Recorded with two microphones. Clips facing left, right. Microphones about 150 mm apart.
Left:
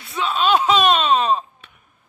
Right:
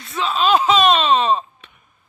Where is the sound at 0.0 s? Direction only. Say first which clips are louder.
Right 1 dB; centre (ahead or behind).